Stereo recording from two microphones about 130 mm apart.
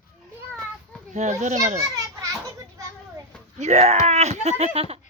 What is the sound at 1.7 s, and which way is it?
Children playing, 25° right (ahead or behind).